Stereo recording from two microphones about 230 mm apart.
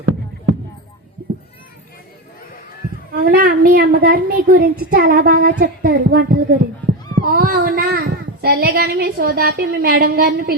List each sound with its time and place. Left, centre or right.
3.1 s a child's voice: right